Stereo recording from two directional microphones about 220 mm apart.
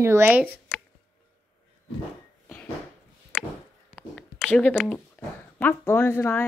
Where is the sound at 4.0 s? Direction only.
5° left (ahead or behind).